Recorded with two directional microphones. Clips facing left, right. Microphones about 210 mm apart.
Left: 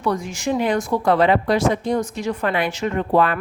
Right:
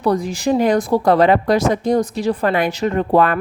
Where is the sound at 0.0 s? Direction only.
35° right (ahead or behind).